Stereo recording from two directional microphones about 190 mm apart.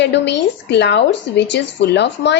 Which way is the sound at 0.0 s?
65° left (ahead or behind).